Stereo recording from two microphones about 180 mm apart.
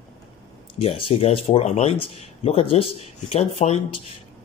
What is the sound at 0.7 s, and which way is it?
Speech, 30° left (ahead or behind).